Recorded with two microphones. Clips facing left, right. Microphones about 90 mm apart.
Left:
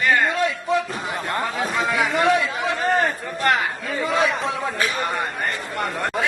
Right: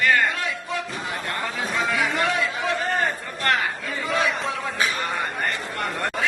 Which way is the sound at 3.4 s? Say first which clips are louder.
Left 3 dB; 15° left (ahead or behind).